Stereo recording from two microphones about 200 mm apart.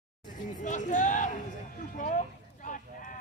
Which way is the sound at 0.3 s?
40° left (ahead or behind).